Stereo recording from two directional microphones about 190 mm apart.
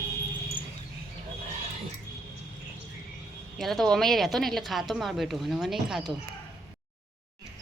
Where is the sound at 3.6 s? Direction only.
Centre (ahead or behind).